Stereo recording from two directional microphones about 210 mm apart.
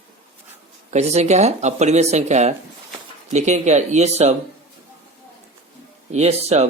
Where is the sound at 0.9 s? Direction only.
30° right (ahead or behind).